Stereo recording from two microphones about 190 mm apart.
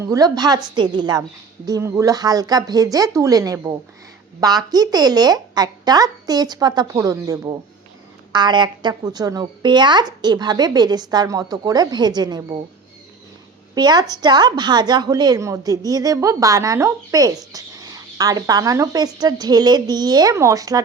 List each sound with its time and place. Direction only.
0.0 s a woman's voice: 20° right (ahead or behind)
13.7 s a woman's voice: 20° right (ahead or behind)